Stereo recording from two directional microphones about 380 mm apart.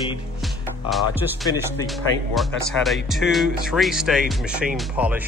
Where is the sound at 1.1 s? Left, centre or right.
Centre.